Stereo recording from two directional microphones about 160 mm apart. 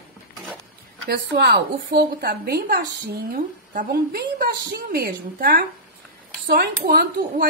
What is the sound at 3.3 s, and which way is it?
A woman's voice, 65° right (ahead or behind).